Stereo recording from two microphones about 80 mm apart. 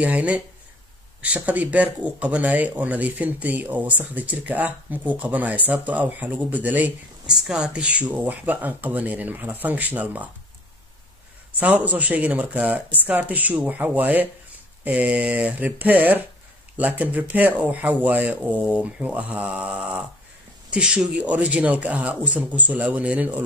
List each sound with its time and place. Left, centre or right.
0.0 s speech: centre
7.4 s speech: centre
11.6 s speech: centre